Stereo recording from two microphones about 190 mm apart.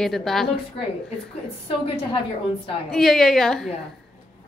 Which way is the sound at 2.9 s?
Centre (ahead or behind).